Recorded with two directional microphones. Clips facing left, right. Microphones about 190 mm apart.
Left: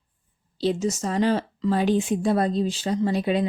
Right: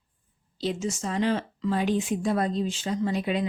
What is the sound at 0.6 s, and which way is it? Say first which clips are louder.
Speech: left 5 dB; 35° left (ahead or behind).